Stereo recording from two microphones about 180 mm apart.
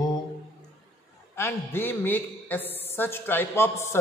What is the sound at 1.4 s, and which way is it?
A man's voice, 10° left (ahead or behind).